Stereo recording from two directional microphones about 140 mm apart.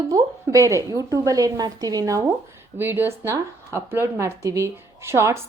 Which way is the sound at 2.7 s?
15° right (ahead or behind).